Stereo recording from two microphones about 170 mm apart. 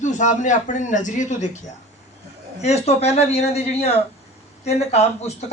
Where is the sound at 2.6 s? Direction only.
40° left (ahead or behind).